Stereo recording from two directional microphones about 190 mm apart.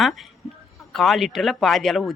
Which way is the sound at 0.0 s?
Centre (ahead or behind).